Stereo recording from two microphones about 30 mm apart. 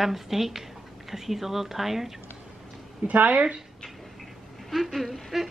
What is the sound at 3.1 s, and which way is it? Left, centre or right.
Speech, right.